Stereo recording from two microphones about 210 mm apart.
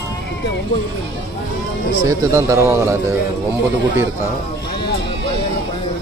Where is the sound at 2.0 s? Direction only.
15° right (ahead or behind).